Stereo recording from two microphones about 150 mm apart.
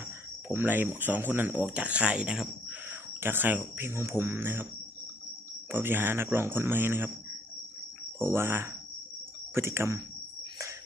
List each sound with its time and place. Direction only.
0.4 s speech: 15° right (ahead or behind)
5.7 s speech: 15° right (ahead or behind)
8.2 s speech: 15° right (ahead or behind)